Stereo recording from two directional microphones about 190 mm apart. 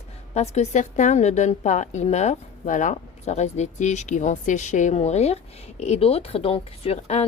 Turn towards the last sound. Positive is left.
turn(degrees=35)  # may be behind; listen again after turning